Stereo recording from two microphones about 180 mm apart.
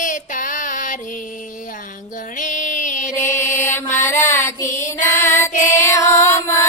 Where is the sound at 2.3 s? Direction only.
45° left (ahead or behind).